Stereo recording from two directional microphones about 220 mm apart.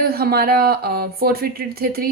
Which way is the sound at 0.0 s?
45° right (ahead or behind).